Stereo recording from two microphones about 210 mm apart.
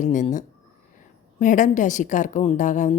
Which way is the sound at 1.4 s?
35° left (ahead or behind).